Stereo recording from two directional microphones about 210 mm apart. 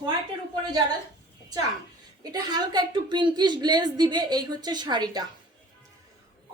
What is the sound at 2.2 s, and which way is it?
A woman's voice, 20° right (ahead or behind).